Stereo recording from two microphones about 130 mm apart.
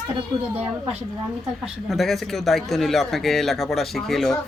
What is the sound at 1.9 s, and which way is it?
Speech, centre (ahead or behind).